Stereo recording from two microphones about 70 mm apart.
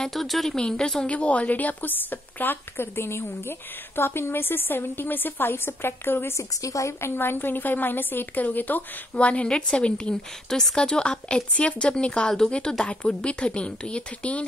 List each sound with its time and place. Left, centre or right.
0.0 s a woman's voice: centre; by 6.4 s left
6.6 s a woman's voice: left; by 14.4 s centre